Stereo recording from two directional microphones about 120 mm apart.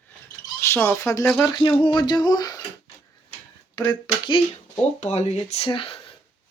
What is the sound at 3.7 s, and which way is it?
Speech, 35° left (ahead or behind).